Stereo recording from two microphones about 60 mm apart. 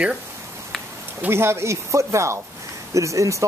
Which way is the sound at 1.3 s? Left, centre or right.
Right.